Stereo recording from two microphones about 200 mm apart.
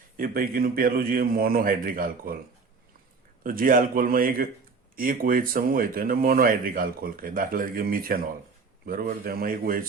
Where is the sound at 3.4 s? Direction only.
45° right (ahead or behind).